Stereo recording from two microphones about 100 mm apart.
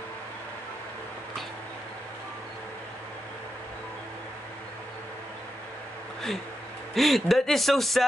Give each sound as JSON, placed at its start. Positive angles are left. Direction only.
{"t": 6.9, "sound": "speech", "side_deg": 0}